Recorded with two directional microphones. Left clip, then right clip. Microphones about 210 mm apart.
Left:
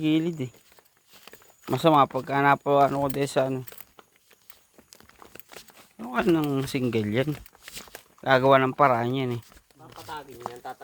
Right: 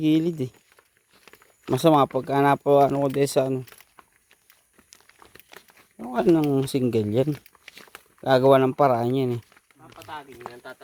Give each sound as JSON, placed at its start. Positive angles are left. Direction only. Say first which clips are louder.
{"t": 0.0, "sound": "speech", "louder": "right 3 dB", "side_deg": -35}
{"t": 1.7, "sound": "speech", "louder": "right 1 dB", "side_deg": -35}
{"t": 5.5, "sound": "a sound", "louder": "right 1 dB", "side_deg": -10}
{"t": 6.3, "sound": "speech", "louder": "right 4 dB", "side_deg": -35}
{"t": 7.5, "sound": "walk", "louder": "even", "side_deg": -15}
{"t": 8.4, "sound": "speech", "louder": "right 2 dB", "side_deg": -35}